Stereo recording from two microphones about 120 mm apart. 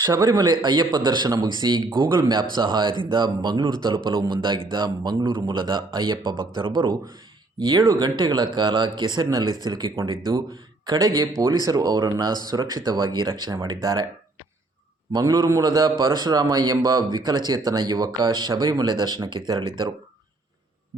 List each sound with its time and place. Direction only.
0.0 s a man's voice: 30° right (ahead or behind)
15.1 s a man's voice: 30° right (ahead or behind)